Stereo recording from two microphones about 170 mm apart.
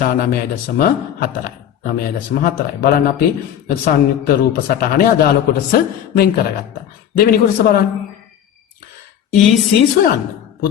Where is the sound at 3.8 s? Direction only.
60° left (ahead or behind).